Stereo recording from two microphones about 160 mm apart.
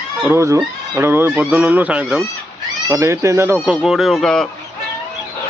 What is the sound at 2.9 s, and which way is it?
Speech, 20° right (ahead or behind).